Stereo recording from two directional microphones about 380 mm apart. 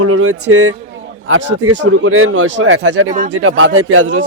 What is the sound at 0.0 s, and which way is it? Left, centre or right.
A man's voice, right.